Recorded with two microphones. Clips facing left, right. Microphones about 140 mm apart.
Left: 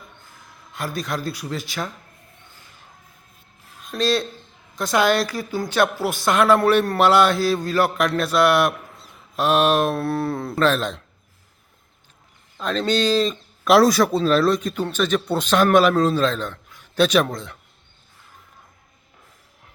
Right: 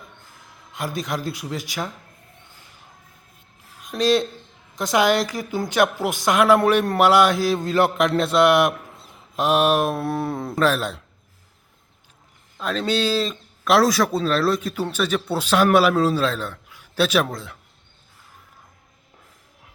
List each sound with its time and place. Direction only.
0.7 s speech: 20° right (ahead or behind)
3.8 s speech: 15° right (ahead or behind)
12.5 s speech: 5° right (ahead or behind)